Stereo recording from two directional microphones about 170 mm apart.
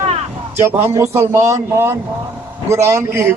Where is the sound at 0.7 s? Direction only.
15° right (ahead or behind).